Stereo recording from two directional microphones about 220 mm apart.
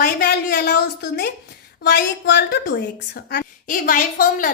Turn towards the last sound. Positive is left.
turn(degrees=40)  # may be behind; listen again after turning